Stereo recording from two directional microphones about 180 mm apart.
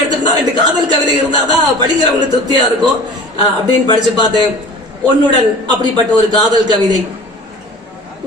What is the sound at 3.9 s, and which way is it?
A man's voice, 25° right (ahead or behind).